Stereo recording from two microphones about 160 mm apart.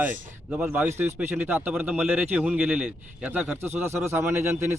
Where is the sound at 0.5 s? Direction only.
5° right (ahead or behind).